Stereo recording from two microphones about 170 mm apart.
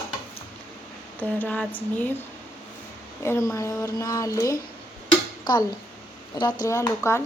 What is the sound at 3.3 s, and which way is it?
Speech, 15° left (ahead or behind).